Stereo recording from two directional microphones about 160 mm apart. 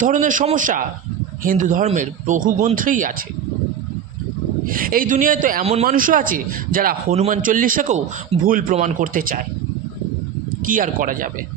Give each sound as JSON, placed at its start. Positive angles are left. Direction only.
{"t": 0.0, "sound": "speech", "side_deg": -55}
{"t": 4.6, "sound": "speech", "side_deg": -60}
{"t": 5.6, "sound": "speech", "side_deg": -40}
{"t": 5.9, "sound": "speech", "side_deg": -60}
{"t": 7.1, "sound": "speech", "side_deg": -40}
{"t": 7.4, "sound": "speech", "side_deg": -60}
{"t": 10.7, "sound": "speech", "side_deg": -55}